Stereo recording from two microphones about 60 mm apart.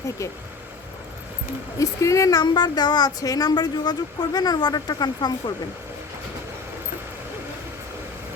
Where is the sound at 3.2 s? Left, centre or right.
Left.